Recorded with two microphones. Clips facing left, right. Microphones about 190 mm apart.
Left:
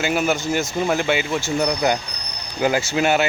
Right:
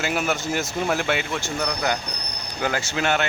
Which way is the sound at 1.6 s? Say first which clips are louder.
Left 5 dB; 15° left (ahead or behind).